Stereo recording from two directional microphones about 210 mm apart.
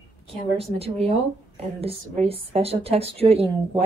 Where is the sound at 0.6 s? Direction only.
30° right (ahead or behind).